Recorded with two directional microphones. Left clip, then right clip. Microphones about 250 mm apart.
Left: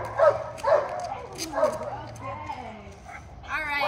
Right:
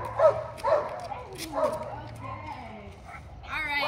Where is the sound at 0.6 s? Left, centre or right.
Left.